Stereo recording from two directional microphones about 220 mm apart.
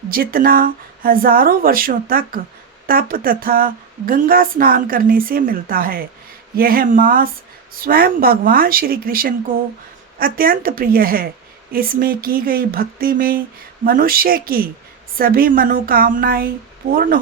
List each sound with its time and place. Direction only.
0.1 s speech: 40° right (ahead or behind)